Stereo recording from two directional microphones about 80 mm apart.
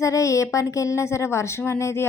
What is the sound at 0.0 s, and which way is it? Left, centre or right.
A woman's voice, left.